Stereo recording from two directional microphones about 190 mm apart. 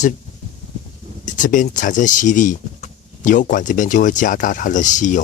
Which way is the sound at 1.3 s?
40° left (ahead or behind).